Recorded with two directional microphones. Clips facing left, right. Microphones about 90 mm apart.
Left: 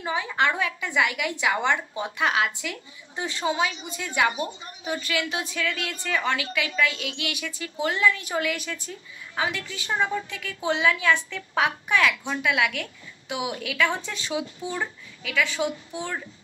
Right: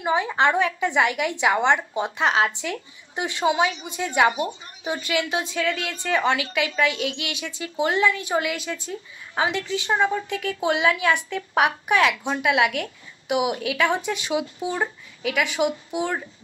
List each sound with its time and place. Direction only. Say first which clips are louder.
0.0 s a woman's voice: right 4 dB; 25° right (ahead or behind)
3.2 s a woman's voice: right 4 dB; 20° right (ahead or behind)